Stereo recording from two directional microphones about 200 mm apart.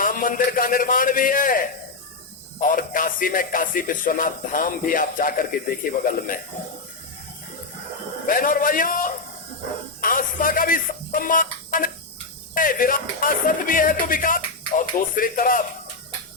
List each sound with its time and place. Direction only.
0.0 s a man's voice: 45° left (ahead or behind)
8.3 s a man's voice: 45° left (ahead or behind)